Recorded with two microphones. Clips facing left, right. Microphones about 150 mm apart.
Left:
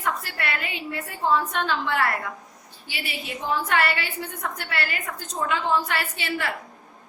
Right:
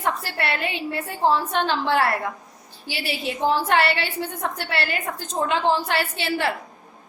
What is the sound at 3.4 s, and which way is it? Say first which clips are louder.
A woman's voice: right 4 dB; 30° right (ahead or behind).